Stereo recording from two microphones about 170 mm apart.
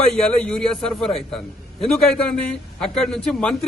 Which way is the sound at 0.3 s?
5° left (ahead or behind).